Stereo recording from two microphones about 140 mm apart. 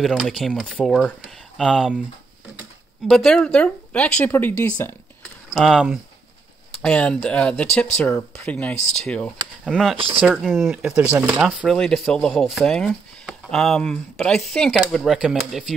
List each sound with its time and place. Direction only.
0.1 s speech: centre (ahead or behind)
3.3 s speech: 5° left (ahead or behind)
5.5 s speech: centre (ahead or behind)
9.9 s speech: 40° right (ahead or behind)
10.4 s speech: centre (ahead or behind)
10.8 s speech: 10° right (ahead or behind)
11.6 s speech: centre (ahead or behind)